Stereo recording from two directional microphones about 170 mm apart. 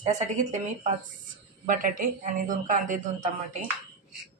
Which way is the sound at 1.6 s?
55° right (ahead or behind).